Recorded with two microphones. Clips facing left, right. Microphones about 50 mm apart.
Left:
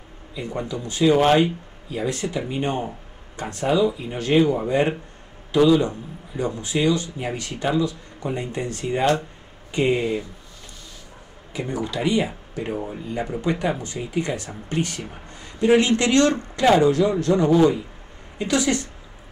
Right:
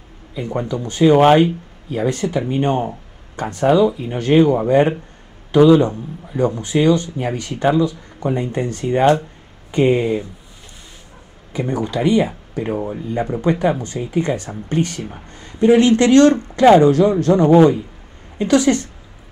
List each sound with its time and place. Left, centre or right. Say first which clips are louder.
0.3 s a man's voice: right 6 dB; right
1.9 s a man's voice: right 6 dB; right
11.5 s a man's voice: right 6 dB; right
15.3 s a sound: right 6 dB; right
16.0 s a man's voice: right 7 dB; right